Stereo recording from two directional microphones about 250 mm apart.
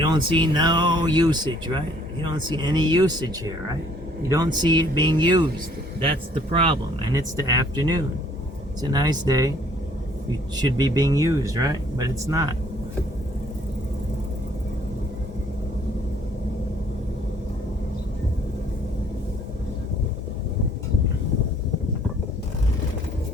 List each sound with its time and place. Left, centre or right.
0.0 s speech: centre
10.6 s speech: centre